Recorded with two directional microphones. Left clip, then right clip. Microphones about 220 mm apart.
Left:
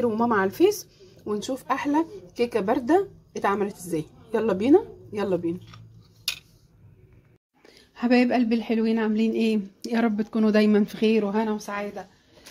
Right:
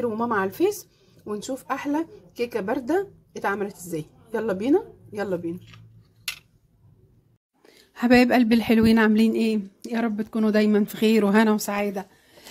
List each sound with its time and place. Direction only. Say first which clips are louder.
0.0 s a woman's voice: left 2 dB; centre (ahead or behind)
7.6 s a woman's voice: right 3 dB; 10° right (ahead or behind)
9.5 s a woman's voice: left 1 dB; centre (ahead or behind)
11.0 s speech: right 4 dB; 15° right (ahead or behind)
11.4 s a woman's voice: right 5 dB; 55° right (ahead or behind)